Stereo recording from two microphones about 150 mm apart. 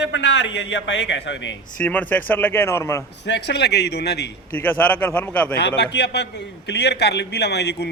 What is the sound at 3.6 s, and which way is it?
Speech, 90° left.